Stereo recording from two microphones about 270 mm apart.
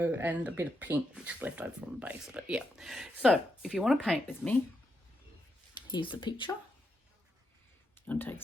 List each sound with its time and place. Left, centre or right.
0.0 s speech: centre
5.9 s speech: centre
8.0 s speech: centre